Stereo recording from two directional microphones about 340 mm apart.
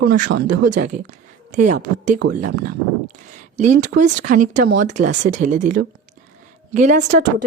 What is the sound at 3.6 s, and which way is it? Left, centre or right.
Speech, right.